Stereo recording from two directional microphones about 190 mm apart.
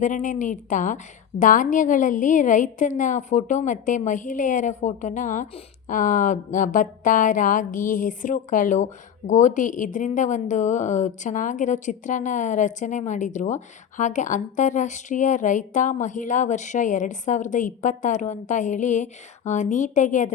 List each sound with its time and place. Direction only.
0.0 s speech: 40° left (ahead or behind)